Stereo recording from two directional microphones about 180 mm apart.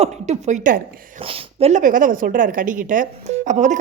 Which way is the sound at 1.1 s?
30° right (ahead or behind).